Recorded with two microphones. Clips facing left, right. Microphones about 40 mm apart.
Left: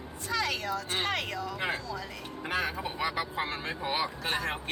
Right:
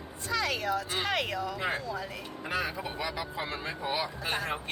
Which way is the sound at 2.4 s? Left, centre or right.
Left.